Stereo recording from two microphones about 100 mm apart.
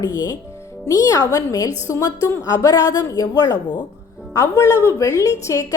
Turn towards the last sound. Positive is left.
turn(degrees=30)  # may be behind; listen again after turning